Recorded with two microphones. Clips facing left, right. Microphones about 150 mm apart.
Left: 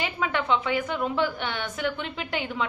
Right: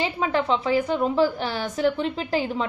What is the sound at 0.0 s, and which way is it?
A woman's voice, 35° right (ahead or behind).